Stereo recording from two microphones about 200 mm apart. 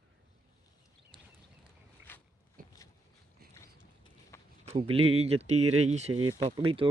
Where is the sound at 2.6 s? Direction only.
45° right (ahead or behind).